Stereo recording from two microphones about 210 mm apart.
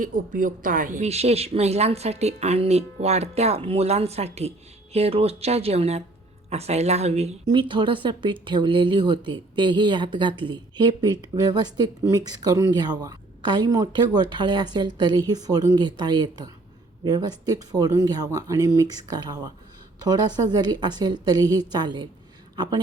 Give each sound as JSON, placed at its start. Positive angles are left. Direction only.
{"t": 0.0, "sound": "speech", "side_deg": -40}